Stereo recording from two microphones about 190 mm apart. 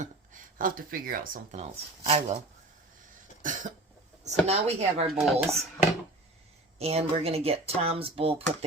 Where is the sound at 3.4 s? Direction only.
40° right (ahead or behind).